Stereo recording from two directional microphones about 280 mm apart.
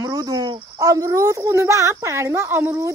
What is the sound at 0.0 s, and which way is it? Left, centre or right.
Speech, centre.